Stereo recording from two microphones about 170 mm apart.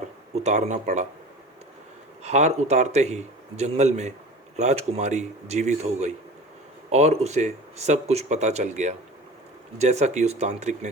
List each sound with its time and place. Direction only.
0.3 s speech: 40° right (ahead or behind)
2.2 s speech: 40° right (ahead or behind)